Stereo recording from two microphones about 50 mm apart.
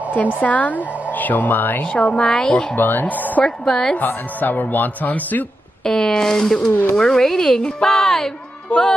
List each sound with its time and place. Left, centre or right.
0.1 s speech: left
2.7 s speech: left
3.4 s speech: centre
3.9 s speech: left
5.9 s speech: centre
8.6 s music: centre